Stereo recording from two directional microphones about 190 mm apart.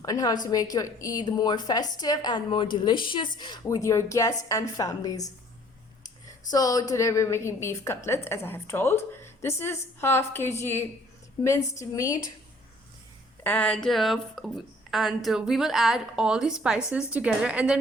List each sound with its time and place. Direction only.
0.0 s a woman's voice: 20° left (ahead or behind)
6.5 s a woman's voice: 20° left (ahead or behind)
13.4 s speech: 10° left (ahead or behind)